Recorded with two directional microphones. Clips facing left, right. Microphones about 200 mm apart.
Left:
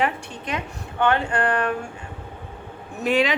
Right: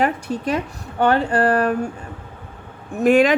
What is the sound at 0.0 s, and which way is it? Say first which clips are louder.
A woman's voice: right 5 dB; 40° right (ahead or behind).